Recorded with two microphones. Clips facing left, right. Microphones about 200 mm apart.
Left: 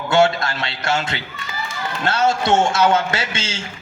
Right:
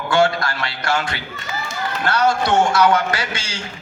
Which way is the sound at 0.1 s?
25° left (ahead or behind).